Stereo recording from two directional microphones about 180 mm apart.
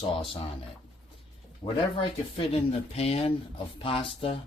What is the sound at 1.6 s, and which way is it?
Speech, 30° left (ahead or behind).